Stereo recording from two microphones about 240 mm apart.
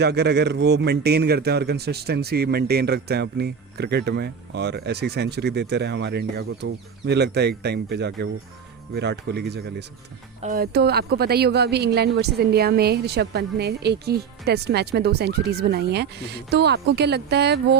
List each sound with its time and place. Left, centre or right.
0.0 s a man's voice: right